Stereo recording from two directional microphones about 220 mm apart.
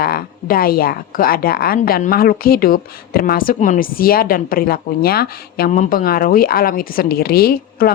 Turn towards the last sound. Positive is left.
turn(degrees=45)  # may be behind; listen again after turning